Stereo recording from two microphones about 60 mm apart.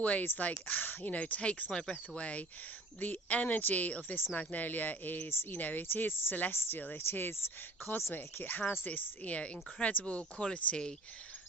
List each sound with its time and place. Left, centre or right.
0.0 s speech: left